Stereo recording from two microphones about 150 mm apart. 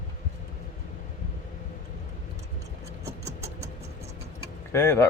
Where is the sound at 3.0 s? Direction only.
20° right (ahead or behind).